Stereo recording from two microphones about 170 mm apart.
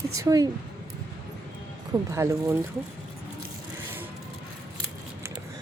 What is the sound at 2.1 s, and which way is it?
Speech, 15° right (ahead or behind).